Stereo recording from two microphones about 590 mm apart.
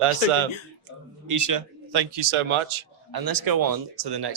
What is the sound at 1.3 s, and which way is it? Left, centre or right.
Speech, right.